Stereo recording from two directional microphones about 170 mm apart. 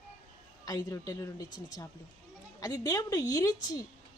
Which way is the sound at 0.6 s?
20° left (ahead or behind).